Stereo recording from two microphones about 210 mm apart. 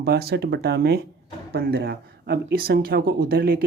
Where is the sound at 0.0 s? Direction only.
50° right (ahead or behind).